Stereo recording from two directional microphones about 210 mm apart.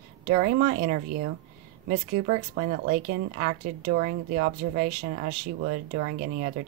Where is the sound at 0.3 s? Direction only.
45° right (ahead or behind).